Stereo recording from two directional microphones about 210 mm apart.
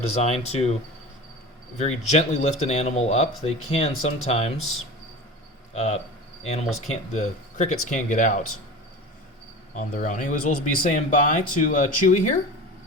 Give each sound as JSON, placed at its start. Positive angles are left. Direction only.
{"t": 0.0, "sound": "speech", "side_deg": 30}
{"t": 1.8, "sound": "speech", "side_deg": 30}
{"t": 5.7, "sound": "speech", "side_deg": 30}
{"t": 9.7, "sound": "speech", "side_deg": 40}